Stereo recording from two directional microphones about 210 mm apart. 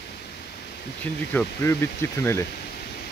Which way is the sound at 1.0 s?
10° left (ahead or behind).